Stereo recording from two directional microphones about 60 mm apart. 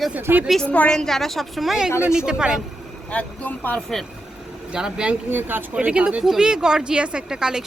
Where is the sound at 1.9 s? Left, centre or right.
Left.